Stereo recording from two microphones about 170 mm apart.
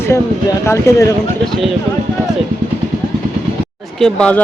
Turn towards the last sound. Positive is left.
turn(degrees=5)  # may be behind; listen again after turning